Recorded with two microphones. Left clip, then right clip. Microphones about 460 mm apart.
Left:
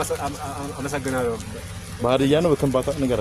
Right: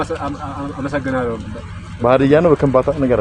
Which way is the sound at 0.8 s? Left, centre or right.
Left.